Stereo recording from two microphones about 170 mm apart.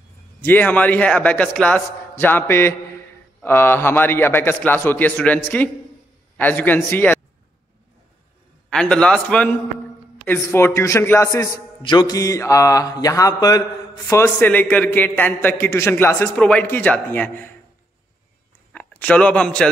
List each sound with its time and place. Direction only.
0.4 s speech: 10° left (ahead or behind)
8.6 s a man's voice: 5° left (ahead or behind)
11.8 s speech: 25° left (ahead or behind); by 17.5 s 10° left (ahead or behind)
18.7 s a man's voice: 10° left (ahead or behind)